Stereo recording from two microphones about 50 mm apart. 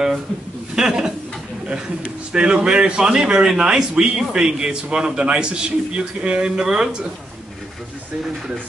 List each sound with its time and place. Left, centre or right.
0.7 s speech: centre
2.3 s speech: centre